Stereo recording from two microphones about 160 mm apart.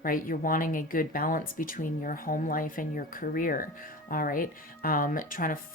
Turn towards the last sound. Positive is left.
turn(degrees=60)  # may be behind; listen again after turning